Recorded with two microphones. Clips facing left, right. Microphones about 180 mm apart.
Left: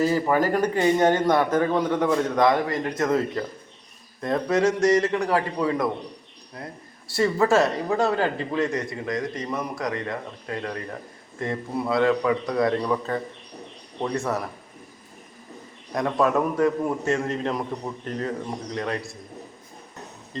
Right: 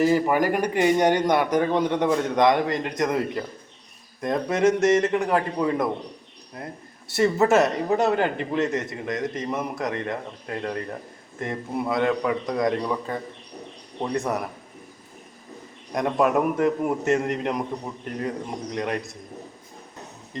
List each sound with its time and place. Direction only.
0.0 s a man's voice: 15° right (ahead or behind)
7.1 s a man's voice: 20° right (ahead or behind)
11.3 s a man's voice: 20° right (ahead or behind)
16.0 s a man's voice: 20° right (ahead or behind)
18.7 s a man's voice: 20° right (ahead or behind)
20.3 s speech: 20° right (ahead or behind)